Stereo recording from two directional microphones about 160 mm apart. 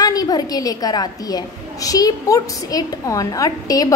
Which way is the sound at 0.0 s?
25° left (ahead or behind).